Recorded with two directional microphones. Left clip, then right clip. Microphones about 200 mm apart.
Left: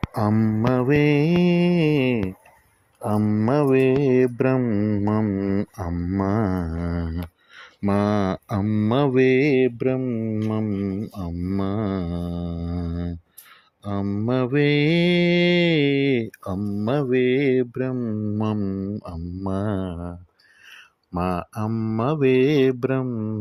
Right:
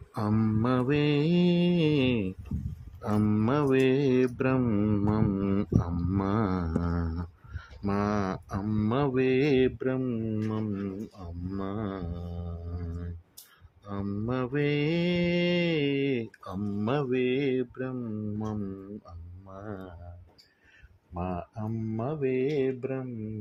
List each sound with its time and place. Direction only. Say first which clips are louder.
0.1 s mantra: left 6 dB; 30° left (ahead or behind)
4.6 s mantra: left 5 dB; 10° left (ahead or behind)
6.2 s mantra: left 6 dB; 20° left (ahead or behind)
6.8 s mantra: left 4 dB; 5° left (ahead or behind)
7.9 s mantra: left 7 dB; 30° left (ahead or behind)
21.1 s mantra: left 9 dB; 30° left (ahead or behind)